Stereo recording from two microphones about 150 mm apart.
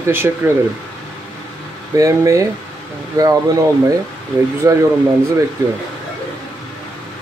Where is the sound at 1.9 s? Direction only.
20° right (ahead or behind).